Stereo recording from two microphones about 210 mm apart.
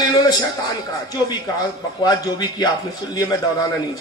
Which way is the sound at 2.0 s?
20° left (ahead or behind).